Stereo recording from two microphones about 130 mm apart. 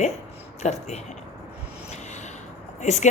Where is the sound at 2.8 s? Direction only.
60° left (ahead or behind).